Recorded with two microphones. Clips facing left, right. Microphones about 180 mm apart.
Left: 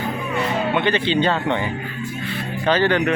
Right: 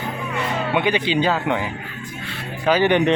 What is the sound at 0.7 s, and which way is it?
Speech, 15° right (ahead or behind).